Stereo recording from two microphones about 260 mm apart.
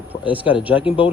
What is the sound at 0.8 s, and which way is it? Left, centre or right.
Speech, centre.